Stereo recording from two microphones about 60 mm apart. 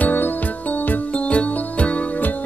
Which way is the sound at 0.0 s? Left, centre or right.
Left.